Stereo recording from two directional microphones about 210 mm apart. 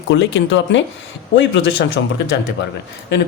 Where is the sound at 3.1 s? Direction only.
55° left (ahead or behind).